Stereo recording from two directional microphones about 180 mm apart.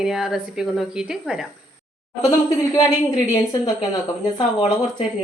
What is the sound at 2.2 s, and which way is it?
Speech, 20° left (ahead or behind).